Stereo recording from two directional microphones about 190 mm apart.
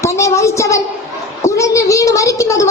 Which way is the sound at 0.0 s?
15° left (ahead or behind).